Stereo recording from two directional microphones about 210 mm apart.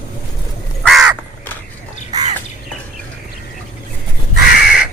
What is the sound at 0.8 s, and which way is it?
Crow, centre (ahead or behind).